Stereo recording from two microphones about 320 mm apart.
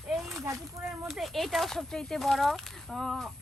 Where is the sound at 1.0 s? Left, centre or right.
Centre.